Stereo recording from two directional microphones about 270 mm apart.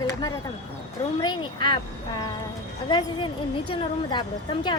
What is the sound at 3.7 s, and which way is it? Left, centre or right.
Speech, centre.